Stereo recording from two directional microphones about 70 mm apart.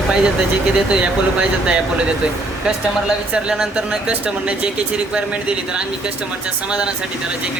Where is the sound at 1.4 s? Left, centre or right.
Centre.